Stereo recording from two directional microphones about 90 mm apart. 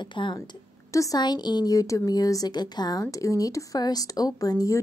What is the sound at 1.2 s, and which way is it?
Speech, 55° left (ahead or behind).